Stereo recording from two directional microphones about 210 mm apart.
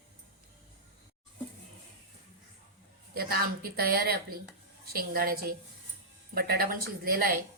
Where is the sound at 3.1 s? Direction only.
45° right (ahead or behind).